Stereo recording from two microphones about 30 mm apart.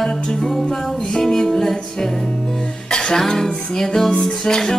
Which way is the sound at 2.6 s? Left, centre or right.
Left.